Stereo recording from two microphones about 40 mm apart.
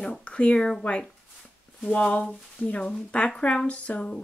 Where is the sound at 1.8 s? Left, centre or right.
Left.